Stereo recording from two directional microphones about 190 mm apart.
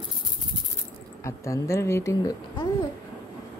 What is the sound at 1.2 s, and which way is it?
Speech, 15° left (ahead or behind).